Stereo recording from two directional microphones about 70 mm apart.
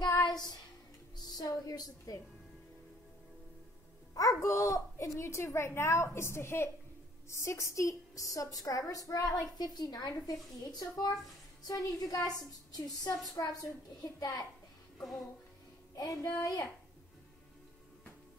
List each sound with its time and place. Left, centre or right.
0.0 s child singing: left
1.1 s music: left
1.5 s a woman's voice: left
4.1 s a woman's voice: left
9.6 s a child's voice: left
15.0 s music: left
16.2 s a woman's voice: left